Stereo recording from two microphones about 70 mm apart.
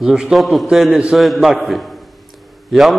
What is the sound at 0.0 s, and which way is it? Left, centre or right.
A man's voice, centre.